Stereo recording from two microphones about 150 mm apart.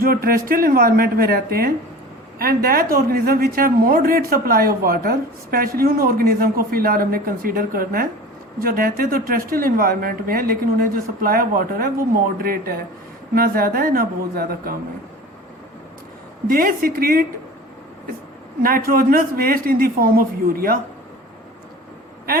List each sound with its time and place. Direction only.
0.0 s a woman's voice: 75° right (ahead or behind)
2.4 s a woman's voice: 80° right
16.5 s a woman's voice: 75° right (ahead or behind)
18.6 s a woman's voice: 75° right (ahead or behind)